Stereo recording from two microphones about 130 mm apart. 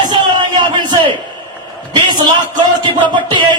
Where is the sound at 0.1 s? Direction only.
35° right (ahead or behind).